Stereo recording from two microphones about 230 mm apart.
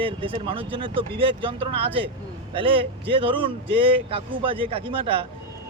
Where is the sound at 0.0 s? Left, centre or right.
Right.